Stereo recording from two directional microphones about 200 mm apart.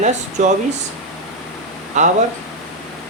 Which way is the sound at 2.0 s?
35° right (ahead or behind).